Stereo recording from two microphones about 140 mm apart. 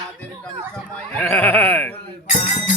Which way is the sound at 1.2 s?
15° left (ahead or behind).